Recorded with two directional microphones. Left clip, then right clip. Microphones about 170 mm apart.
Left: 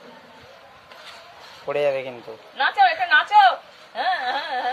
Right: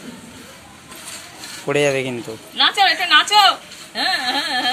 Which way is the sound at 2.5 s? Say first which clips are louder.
Right 3 dB; 25° left (ahead or behind).